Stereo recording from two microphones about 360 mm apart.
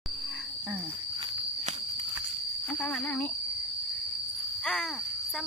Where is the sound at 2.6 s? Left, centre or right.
Centre.